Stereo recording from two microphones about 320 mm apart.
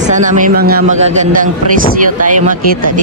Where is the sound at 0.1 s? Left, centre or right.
Right.